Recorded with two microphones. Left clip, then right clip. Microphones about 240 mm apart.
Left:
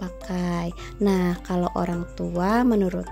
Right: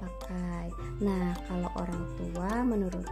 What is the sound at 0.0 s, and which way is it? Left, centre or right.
Speech, left.